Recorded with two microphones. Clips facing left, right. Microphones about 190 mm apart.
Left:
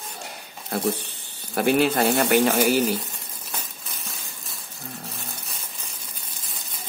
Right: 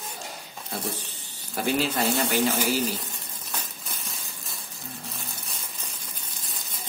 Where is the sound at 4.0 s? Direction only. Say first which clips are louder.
Left 1 dB; centre (ahead or behind).